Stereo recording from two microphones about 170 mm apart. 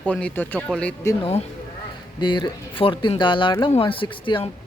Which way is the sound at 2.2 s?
25° left (ahead or behind).